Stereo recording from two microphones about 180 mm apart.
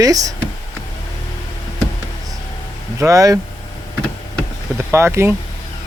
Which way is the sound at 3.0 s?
20° right (ahead or behind).